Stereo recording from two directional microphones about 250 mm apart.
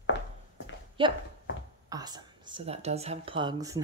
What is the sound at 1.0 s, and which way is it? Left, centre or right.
Speech, right.